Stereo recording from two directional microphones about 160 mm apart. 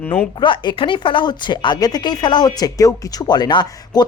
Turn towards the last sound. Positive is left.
turn(degrees=25)  # may be behind; listen again after turning